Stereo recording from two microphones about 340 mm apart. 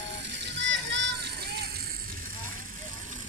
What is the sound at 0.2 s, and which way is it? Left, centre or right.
Music, right.